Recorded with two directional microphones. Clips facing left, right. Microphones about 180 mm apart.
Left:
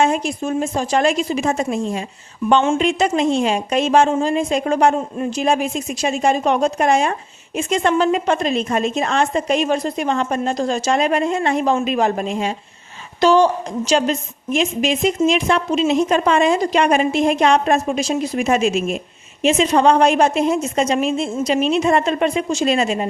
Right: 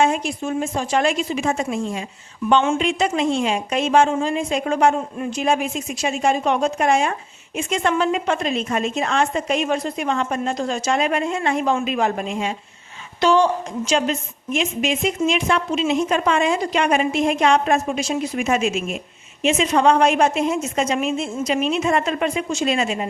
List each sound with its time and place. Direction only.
0.0 s a woman's voice: 40° left (ahead or behind)